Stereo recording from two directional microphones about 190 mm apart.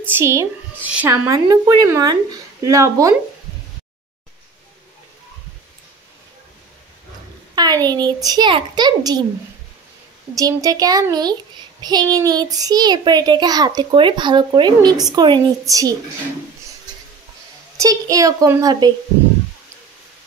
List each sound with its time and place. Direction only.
0.0 s speech: 15° right (ahead or behind)
7.5 s a child's voice: 20° right (ahead or behind)
10.3 s a child's voice: 20° right (ahead or behind)
17.7 s speech: 20° right (ahead or behind)